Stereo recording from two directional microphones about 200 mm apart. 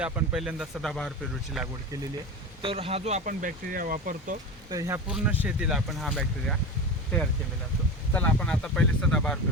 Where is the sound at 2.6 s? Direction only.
30° right (ahead or behind).